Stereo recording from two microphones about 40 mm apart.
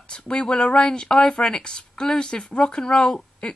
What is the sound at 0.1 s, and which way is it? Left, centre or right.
Speech, left.